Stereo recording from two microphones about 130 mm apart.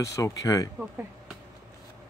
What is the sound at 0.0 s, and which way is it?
Speech, 25° left (ahead or behind).